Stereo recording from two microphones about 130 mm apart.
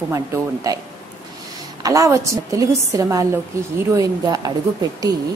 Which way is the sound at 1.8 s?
25° right (ahead or behind).